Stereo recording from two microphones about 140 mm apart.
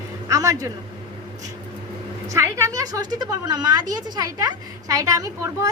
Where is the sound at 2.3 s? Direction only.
20° right (ahead or behind).